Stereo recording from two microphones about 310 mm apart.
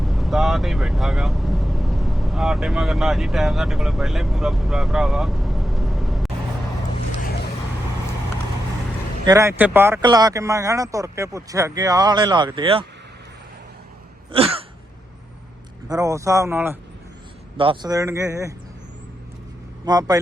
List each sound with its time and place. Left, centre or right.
0.0 s speech: centre
9.2 s speech: centre
14.3 s a sound: centre
15.9 s speech: centre
19.8 s speech: centre